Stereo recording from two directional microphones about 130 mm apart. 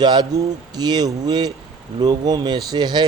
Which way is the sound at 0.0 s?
35° right (ahead or behind).